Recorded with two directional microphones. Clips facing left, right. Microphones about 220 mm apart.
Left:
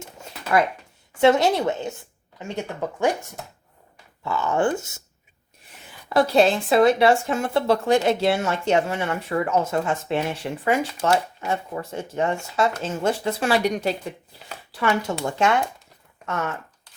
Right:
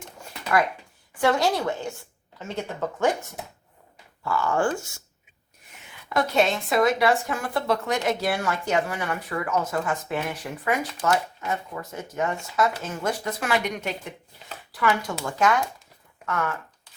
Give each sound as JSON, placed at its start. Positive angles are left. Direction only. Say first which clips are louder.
{"t": 1.2, "sound": "speech", "louder": "left 5 dB", "side_deg": 25}
{"t": 4.2, "sound": "speech", "louder": "left 2 dB", "side_deg": 20}
{"t": 6.1, "sound": "speech", "louder": "left 5 dB", "side_deg": 30}